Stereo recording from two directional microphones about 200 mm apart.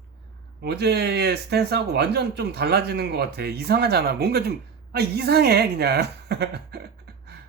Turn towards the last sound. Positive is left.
turn(degrees=-55)  # may be behind; listen again after turning